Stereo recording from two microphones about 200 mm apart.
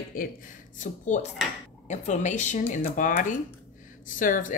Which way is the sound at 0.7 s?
40° left (ahead or behind).